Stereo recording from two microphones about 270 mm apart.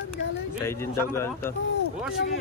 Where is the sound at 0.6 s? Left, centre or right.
Centre.